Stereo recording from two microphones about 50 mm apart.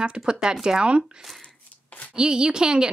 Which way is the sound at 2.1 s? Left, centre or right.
Centre.